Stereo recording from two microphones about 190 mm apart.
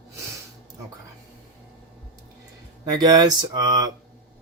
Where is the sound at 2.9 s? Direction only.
20° right (ahead or behind).